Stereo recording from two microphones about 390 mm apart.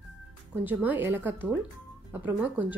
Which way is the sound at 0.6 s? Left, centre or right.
Centre.